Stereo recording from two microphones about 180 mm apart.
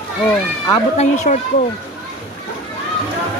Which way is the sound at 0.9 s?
40° left (ahead or behind).